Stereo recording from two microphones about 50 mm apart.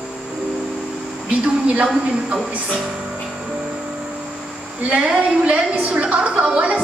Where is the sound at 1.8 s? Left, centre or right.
Centre.